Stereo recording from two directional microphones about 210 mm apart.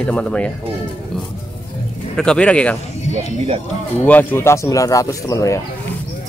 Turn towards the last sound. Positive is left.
turn(degrees=15)  # may be behind; listen again after turning